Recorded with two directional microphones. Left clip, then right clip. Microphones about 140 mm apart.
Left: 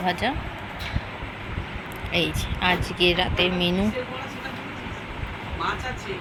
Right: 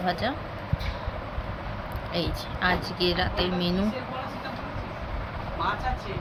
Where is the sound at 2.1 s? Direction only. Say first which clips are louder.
Left 6 dB; 10° left (ahead or behind).